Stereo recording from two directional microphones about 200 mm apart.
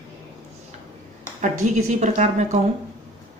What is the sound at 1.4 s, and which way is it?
Speech, 35° right (ahead or behind).